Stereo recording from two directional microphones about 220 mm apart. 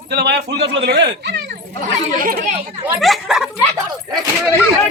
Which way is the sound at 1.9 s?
40° right (ahead or behind).